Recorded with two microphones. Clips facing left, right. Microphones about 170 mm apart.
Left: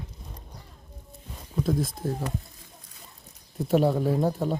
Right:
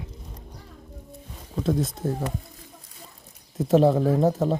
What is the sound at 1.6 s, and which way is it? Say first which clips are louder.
Speech: right 2 dB; 25° right (ahead or behind).